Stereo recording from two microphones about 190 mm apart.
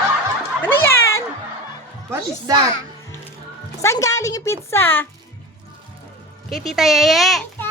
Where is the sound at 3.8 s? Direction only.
15° left (ahead or behind).